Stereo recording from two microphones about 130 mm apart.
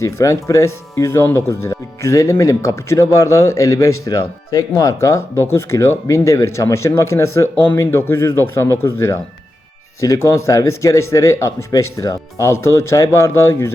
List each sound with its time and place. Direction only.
0.0 s speech: 25° left (ahead or behind)